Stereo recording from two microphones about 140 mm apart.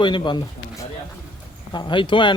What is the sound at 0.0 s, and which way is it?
Speech, 35° left (ahead or behind).